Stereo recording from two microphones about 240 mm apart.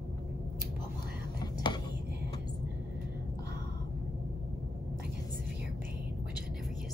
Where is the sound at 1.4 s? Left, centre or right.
Centre.